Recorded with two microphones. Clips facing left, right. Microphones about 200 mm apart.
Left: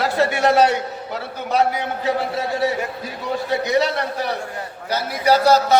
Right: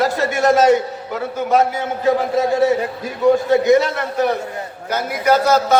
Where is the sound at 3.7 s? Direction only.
50° right (ahead or behind).